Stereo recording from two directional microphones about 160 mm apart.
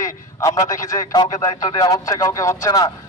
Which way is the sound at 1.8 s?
25° left (ahead or behind).